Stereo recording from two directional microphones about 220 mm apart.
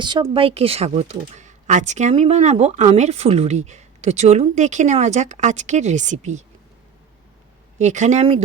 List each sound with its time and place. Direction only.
0.0 s speech: 20° right (ahead or behind)
7.8 s speech: 35° right (ahead or behind)